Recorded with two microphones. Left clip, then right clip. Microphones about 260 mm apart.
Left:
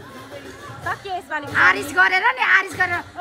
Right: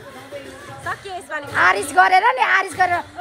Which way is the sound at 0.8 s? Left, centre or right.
Left.